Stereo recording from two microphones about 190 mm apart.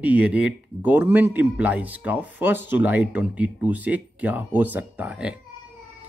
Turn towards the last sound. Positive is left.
turn(degrees=-5)  # may be behind; listen again after turning